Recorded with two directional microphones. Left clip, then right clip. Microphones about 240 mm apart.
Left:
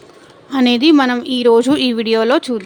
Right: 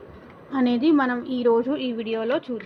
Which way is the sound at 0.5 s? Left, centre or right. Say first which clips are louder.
Left 9 dB; left.